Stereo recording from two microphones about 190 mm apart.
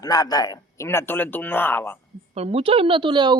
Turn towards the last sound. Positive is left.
turn(degrees=-25)  # may be behind; listen again after turning